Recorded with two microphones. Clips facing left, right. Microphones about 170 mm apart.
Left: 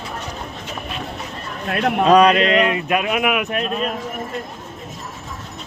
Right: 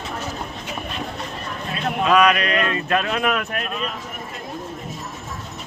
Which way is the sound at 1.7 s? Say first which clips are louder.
Left 6 dB; 60° left (ahead or behind).